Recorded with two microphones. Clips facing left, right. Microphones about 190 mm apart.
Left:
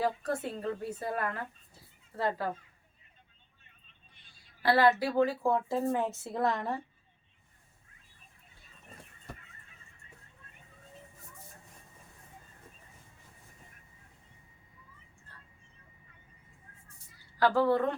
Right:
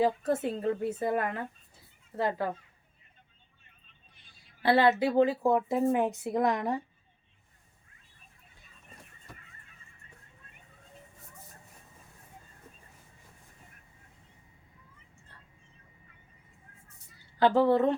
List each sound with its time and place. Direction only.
0.0 s a woman's voice: 20° right (ahead or behind)
4.6 s speech: 20° right (ahead or behind)
17.4 s a woman's voice: 20° right (ahead or behind)